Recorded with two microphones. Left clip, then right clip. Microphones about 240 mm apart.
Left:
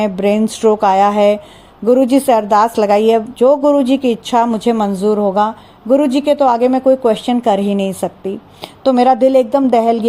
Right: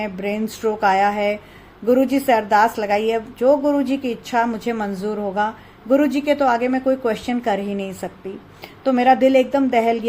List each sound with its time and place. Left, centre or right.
0.0 s a woman's voice: left